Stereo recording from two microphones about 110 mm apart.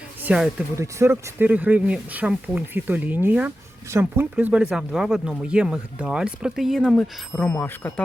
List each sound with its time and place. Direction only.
0.2 s speech: 10° right (ahead or behind)
0.8 s speech: 25° right (ahead or behind)
1.5 s speech: 15° right (ahead or behind)
7.5 s speech: 20° left (ahead or behind)